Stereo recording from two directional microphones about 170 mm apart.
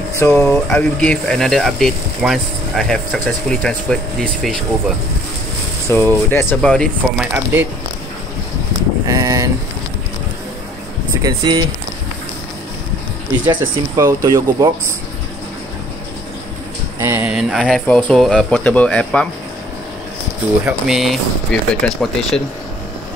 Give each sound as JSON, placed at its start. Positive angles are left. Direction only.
{"t": 0.2, "sound": "speech", "side_deg": 10}
{"t": 5.9, "sound": "speech", "side_deg": 10}
{"t": 7.0, "sound": "speech", "side_deg": -10}
{"t": 9.0, "sound": "speech", "side_deg": -20}
{"t": 11.2, "sound": "speech", "side_deg": -25}
{"t": 13.5, "sound": "speech", "side_deg": -20}
{"t": 17.0, "sound": "speech", "side_deg": -10}
{"t": 20.6, "sound": "speech", "side_deg": -5}